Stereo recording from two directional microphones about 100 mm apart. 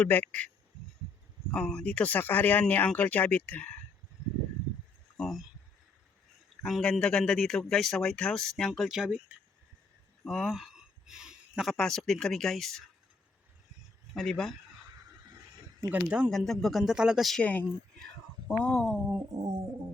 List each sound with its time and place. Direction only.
0.0 s speech: 15° left (ahead or behind)
5.1 s a sound: centre (ahead or behind)
6.6 s speech: 5° left (ahead or behind)
14.1 s speech: 5° left (ahead or behind)
15.9 s speech: 15° right (ahead or behind)
16.3 s speech: 5° left (ahead or behind)
17.4 s speech: 15° left (ahead or behind)
19.3 s a sound: 35° right (ahead or behind)